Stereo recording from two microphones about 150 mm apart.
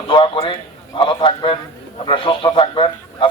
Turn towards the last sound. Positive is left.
turn(degrees=35)  # may be behind; listen again after turning